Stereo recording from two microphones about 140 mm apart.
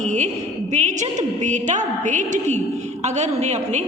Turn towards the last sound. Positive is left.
turn(degrees=-55)  # may be behind; listen again after turning